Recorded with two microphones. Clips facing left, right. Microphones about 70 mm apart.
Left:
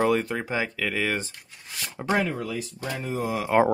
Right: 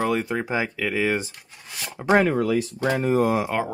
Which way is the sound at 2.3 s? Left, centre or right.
Right.